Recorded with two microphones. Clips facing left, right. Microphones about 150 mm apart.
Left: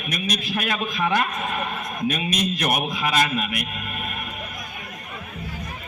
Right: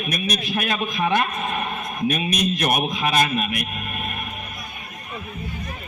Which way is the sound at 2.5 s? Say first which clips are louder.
Right 2 dB; 20° right (ahead or behind).